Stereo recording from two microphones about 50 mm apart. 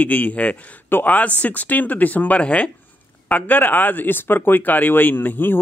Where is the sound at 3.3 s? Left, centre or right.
Left.